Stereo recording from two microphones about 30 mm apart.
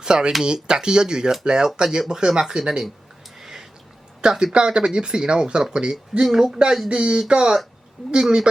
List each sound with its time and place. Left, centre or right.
0.0 s speech: right
3.3 s a sound: centre
4.2 s speech: right
6.2 s speech: centre
6.8 s speech: right
8.0 s speech: centre